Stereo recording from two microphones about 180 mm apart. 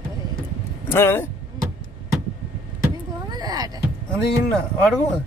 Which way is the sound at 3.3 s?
20° right (ahead or behind).